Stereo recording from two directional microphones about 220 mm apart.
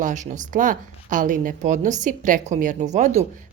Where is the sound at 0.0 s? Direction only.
35° right (ahead or behind).